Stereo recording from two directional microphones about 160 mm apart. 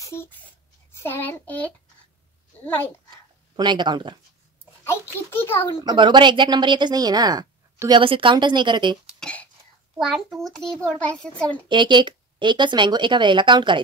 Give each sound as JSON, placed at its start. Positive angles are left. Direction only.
{"t": 0.0, "sound": "a sound", "side_deg": 15}
{"t": 1.0, "sound": "child singing", "side_deg": 10}
{"t": 3.5, "sound": "a woman's voice", "side_deg": -30}
{"t": 4.8, "sound": "a child's voice", "side_deg": 15}
{"t": 5.9, "sound": "a woman's voice", "side_deg": -30}
{"t": 9.0, "sound": "a sound", "side_deg": 5}
{"t": 9.9, "sound": "a child's voice", "side_deg": 0}
{"t": 11.7, "sound": "a woman's voice", "side_deg": -30}